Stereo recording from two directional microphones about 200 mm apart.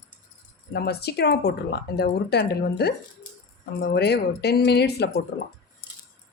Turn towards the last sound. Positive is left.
turn(degrees=50)  # may be behind; listen again after turning